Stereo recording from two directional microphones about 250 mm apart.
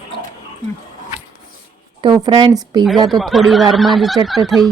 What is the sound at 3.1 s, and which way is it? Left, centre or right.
Speech, centre.